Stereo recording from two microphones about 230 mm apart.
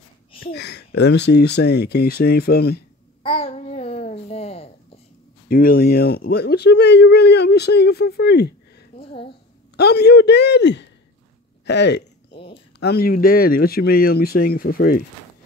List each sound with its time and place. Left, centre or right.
0.4 s speech: left
3.3 s babbling: left
5.5 s speech: left
8.9 s speech: left
9.8 s speech: left
11.6 s a sound: left
12.8 s speech: left